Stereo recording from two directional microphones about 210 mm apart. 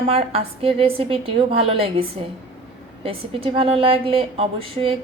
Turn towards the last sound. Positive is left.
turn(degrees=-25)  # may be behind; listen again after turning